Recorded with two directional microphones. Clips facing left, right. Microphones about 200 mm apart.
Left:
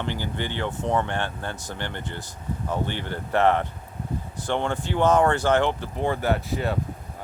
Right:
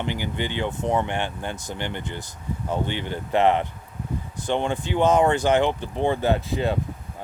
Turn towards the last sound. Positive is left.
turn(degrees=-20)  # may be behind; listen again after turning